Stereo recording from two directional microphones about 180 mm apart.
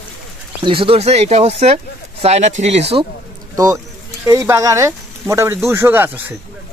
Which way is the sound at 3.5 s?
20° right (ahead or behind).